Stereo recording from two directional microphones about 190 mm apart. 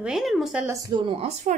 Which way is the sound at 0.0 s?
Centre (ahead or behind).